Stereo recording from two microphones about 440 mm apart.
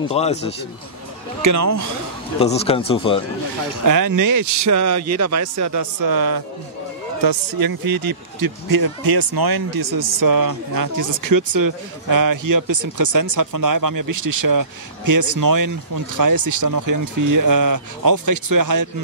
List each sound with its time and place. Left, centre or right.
0.1 s a man's voice: centre
1.4 s speech: right
2.3 s a man's voice: centre
3.8 s speech: right